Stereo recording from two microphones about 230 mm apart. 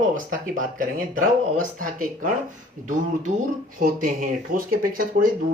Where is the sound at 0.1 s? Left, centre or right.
Right.